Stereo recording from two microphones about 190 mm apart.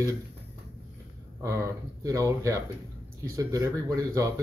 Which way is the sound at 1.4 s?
15° right (ahead or behind).